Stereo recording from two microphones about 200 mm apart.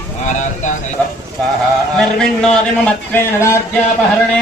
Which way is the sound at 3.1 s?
15° left (ahead or behind).